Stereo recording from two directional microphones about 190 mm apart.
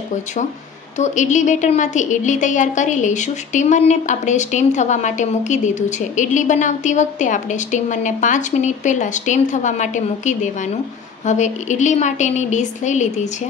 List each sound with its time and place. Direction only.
0.9 s a woman's voice: 40° left (ahead or behind)